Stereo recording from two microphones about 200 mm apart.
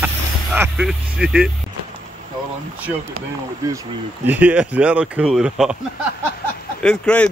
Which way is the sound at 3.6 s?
15° right (ahead or behind).